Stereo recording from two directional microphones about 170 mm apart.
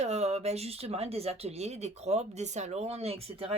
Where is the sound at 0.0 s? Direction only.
40° right (ahead or behind).